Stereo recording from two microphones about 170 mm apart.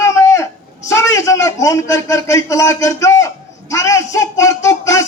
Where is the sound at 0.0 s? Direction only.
15° left (ahead or behind).